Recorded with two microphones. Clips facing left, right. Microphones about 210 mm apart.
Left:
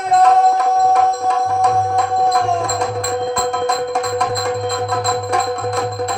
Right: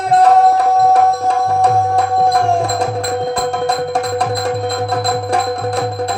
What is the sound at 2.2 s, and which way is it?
Music, 35° right (ahead or behind).